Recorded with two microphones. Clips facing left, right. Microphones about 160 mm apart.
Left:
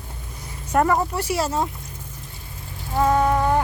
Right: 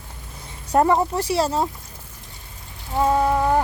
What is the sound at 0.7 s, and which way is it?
Speech, 25° right (ahead or behind).